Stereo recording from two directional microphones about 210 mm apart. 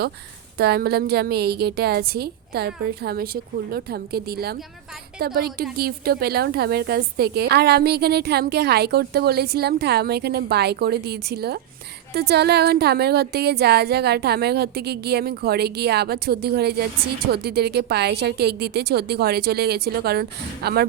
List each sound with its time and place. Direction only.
0.6 s a woman's voice: 50° right (ahead or behind)